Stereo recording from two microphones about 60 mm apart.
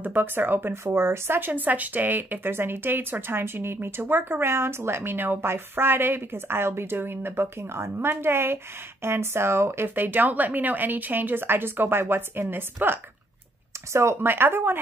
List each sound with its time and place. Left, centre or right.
0.0 s speech: right
14.2 s speech: right